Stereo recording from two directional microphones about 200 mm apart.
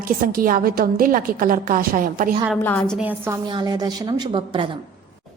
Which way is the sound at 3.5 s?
20° right (ahead or behind).